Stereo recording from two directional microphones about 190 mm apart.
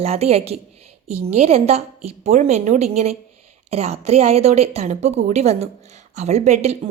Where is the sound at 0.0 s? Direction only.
35° right (ahead or behind).